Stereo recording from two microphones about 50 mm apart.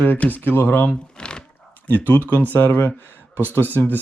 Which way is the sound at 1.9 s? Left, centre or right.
Left.